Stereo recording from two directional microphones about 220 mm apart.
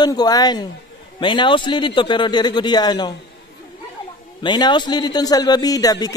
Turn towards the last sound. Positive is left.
turn(degrees=15)  # may be behind; listen again after turning